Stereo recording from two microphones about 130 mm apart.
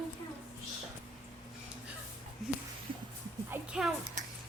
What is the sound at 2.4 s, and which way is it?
Speech, centre (ahead or behind).